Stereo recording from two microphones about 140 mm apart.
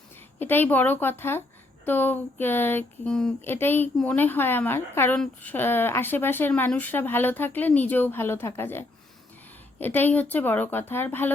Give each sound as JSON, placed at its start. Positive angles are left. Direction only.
{"t": 0.3, "sound": "speech", "side_deg": 15}
{"t": 3.4, "sound": "speech", "side_deg": 15}
{"t": 9.8, "sound": "speech", "side_deg": 15}